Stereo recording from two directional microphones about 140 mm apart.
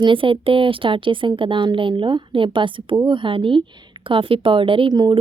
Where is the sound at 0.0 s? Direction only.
35° right (ahead or behind).